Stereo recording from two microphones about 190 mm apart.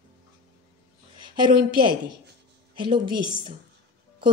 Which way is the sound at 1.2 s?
25° right (ahead or behind).